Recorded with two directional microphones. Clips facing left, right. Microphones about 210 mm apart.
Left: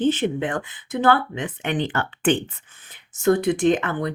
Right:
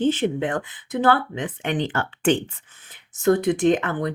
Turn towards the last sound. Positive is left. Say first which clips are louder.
# even
turn(degrees=-40)  # may be behind; listen again after turning